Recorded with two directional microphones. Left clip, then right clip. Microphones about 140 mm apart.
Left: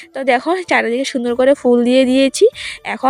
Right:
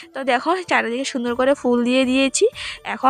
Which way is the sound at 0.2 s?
25° left (ahead or behind).